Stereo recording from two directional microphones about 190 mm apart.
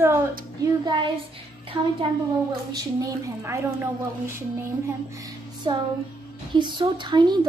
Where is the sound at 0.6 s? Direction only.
25° right (ahead or behind).